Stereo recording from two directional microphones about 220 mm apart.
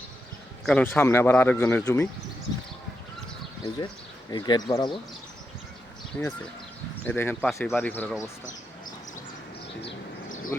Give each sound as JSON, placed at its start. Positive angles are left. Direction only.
{"t": 0.6, "sound": "speech", "side_deg": 5}
{"t": 4.3, "sound": "speech", "side_deg": 20}
{"t": 6.1, "sound": "speech", "side_deg": 5}
{"t": 9.8, "sound": "a sound", "side_deg": 60}